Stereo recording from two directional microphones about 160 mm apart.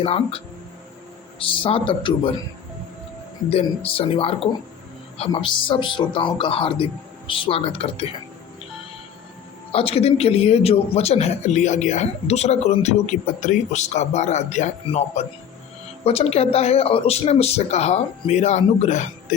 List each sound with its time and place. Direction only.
0.0 s speech: 40° left (ahead or behind)
3.5 s speech: 35° left (ahead or behind)
9.7 s speech: 40° left (ahead or behind)